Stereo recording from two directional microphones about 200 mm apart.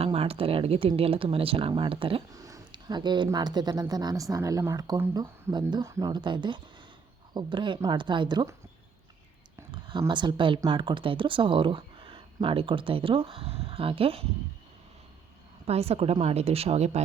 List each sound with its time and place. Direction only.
0.0 s speech: 30° right (ahead or behind)
9.6 s speech: 25° right (ahead or behind)
15.6 s speech: 30° right (ahead or behind)